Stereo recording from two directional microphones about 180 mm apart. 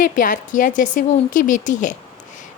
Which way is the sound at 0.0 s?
45° left (ahead or behind).